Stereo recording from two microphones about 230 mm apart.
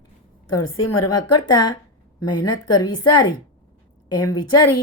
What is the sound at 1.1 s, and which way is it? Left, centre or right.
A woman's voice, centre.